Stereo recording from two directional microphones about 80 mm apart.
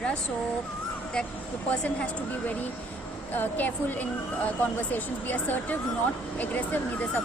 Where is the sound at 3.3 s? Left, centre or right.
Left.